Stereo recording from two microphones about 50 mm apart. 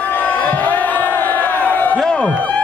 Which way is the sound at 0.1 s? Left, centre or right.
Left.